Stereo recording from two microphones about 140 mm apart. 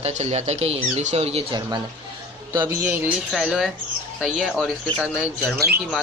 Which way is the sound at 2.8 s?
15° right (ahead or behind).